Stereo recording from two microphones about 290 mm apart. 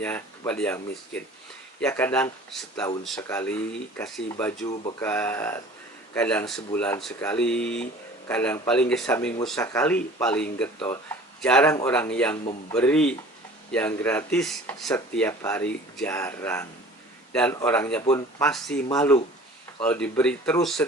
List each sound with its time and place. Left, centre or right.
0.0 s speech: centre
4.7 s speech: centre
4.9 s speech: centre